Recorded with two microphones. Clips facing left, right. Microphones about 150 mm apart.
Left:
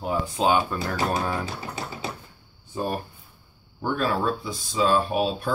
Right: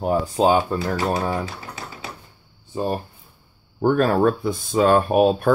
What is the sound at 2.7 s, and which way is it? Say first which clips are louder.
Speech: right 4 dB; 25° right (ahead or behind).